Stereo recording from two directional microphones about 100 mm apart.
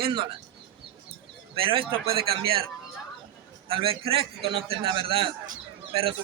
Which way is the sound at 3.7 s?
65° right (ahead or behind).